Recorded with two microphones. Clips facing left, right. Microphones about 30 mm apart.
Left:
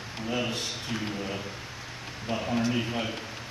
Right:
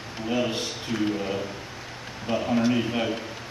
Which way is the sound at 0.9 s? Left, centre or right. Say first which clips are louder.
Right 8 dB; centre.